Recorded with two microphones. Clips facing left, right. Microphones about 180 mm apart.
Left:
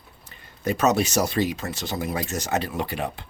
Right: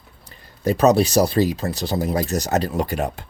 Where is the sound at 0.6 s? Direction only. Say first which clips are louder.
Right 6 dB; 35° right (ahead or behind).